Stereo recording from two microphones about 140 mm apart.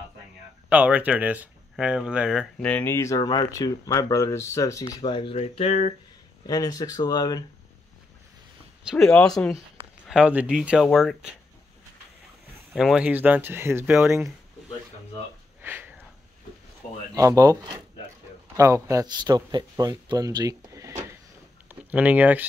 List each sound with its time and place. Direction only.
0.7 s speech: 10° right (ahead or behind)
2.6 s speech: 10° left (ahead or behind); by 5.9 s 50° left (ahead or behind)
6.4 s speech: 25° left (ahead or behind)
8.9 s speech: 5° left (ahead or behind)
10.0 s speech: 5° right (ahead or behind)
12.7 s speech: 5° right (ahead or behind)
15.6 s sniff: 15° right (ahead or behind)
17.1 s speech: 25° right (ahead or behind)
18.6 s speech: 20° right (ahead or behind)
21.6 s speech: 10° right (ahead or behind)